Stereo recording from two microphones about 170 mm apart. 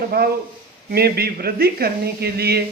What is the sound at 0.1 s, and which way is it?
Speech, 70° right (ahead or behind).